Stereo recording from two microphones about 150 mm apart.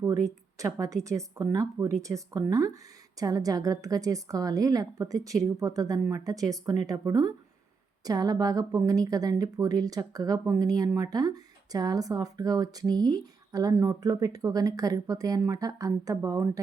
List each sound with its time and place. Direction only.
0.0 s a woman's voice: 20° right (ahead or behind)